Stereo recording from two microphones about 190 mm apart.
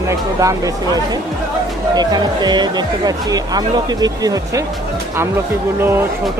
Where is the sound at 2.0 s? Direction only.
20° right (ahead or behind).